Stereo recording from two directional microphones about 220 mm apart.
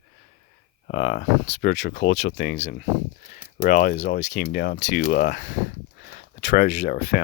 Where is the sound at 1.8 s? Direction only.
55° left (ahead or behind).